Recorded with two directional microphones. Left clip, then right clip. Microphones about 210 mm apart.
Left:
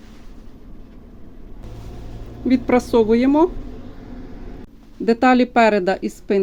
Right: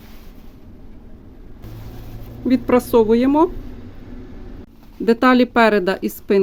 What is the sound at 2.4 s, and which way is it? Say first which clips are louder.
A woman's voice: right 1 dB; 5° right (ahead or behind).